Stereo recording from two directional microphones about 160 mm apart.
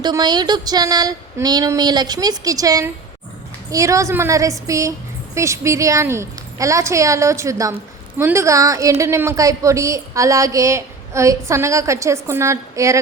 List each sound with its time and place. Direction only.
0.0 s a woman's voice: 25° right (ahead or behind)